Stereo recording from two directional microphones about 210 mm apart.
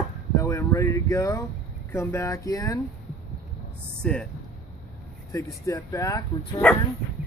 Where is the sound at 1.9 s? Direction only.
10° left (ahead or behind).